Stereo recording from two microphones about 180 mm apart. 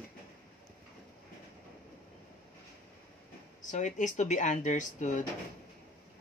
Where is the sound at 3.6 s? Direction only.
45° left (ahead or behind).